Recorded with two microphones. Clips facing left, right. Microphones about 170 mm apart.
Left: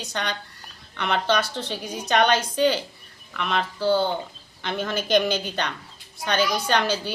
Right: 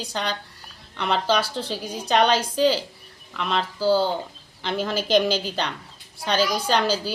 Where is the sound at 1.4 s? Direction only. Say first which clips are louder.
Right 1 dB; 30° right (ahead or behind).